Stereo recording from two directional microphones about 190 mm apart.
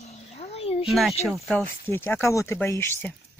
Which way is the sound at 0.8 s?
Centre (ahead or behind).